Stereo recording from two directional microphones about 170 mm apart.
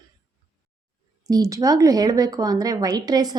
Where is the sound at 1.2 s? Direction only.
20° right (ahead or behind).